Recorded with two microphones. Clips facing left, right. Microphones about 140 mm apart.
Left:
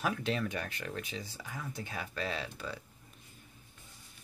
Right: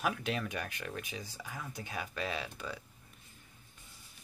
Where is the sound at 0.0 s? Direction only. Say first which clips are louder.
Left 1 dB; 10° right (ahead or behind).